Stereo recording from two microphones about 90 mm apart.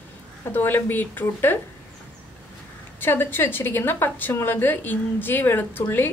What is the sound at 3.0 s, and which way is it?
A woman's voice, 25° left (ahead or behind).